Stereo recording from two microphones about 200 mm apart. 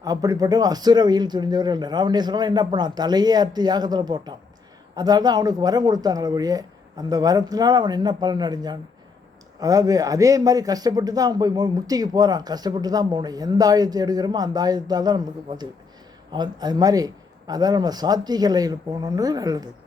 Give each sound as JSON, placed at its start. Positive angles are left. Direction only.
{"t": 0.0, "sound": "a man's voice", "side_deg": -15}